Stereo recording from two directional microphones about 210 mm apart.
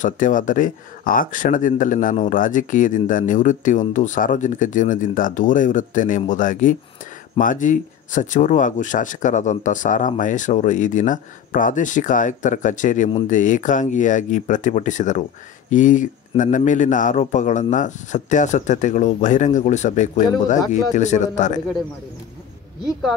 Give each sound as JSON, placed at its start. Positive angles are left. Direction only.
{"t": 0.0, "sound": "speech", "side_deg": 40}